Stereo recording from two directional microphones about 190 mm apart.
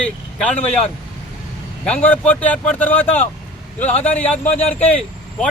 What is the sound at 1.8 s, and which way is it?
Speech, 5° left (ahead or behind).